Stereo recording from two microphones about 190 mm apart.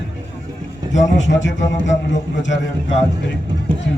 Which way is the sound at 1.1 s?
75° left (ahead or behind).